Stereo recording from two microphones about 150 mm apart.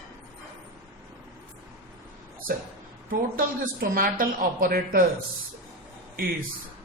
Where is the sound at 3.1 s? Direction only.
75° right (ahead or behind).